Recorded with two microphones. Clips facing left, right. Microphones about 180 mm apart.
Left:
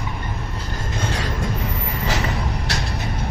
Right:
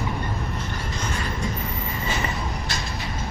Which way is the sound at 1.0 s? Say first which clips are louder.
Left 3 dB; 80° left.